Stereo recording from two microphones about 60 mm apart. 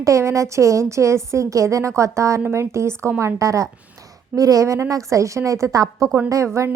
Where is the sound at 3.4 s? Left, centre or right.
Right.